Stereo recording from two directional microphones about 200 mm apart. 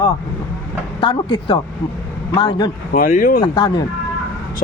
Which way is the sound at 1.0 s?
25° left (ahead or behind).